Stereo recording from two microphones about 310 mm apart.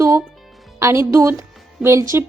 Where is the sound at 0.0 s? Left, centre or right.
Centre.